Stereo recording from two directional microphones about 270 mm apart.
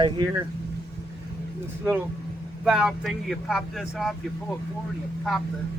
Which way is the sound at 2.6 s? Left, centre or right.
Centre.